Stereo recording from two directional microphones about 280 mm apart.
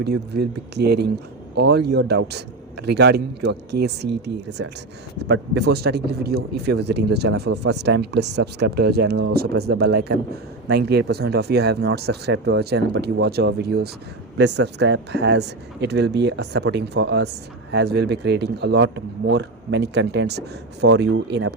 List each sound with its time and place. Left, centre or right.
0.0 s speech: right